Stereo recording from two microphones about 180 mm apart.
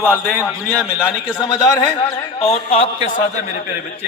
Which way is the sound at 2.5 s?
35° left (ahead or behind).